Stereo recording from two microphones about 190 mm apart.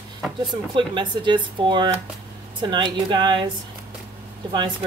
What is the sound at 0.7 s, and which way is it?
Speech, 25° right (ahead or behind).